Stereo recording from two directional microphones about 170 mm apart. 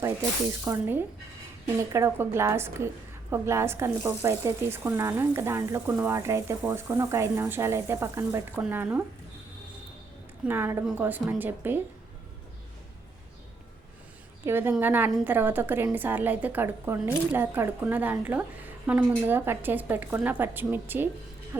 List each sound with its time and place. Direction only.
0.0 s a woman's voice: 20° right (ahead or behind)
10.4 s a woman's voice: 10° right (ahead or behind)
14.4 s a woman's voice: 15° right (ahead or behind)